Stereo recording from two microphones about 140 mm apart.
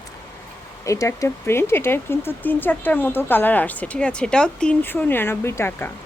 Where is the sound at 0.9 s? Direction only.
20° left (ahead or behind).